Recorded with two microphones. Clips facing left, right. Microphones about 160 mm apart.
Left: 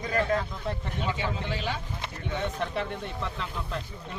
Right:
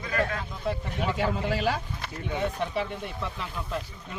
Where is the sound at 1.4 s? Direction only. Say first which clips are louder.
Right 5 dB; 40° right (ahead or behind).